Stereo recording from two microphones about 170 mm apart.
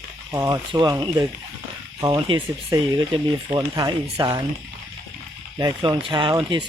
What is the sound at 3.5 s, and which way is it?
Speech, 25° right (ahead or behind).